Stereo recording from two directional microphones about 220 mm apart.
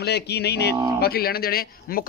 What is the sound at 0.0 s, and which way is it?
Speech, 50° left (ahead or behind).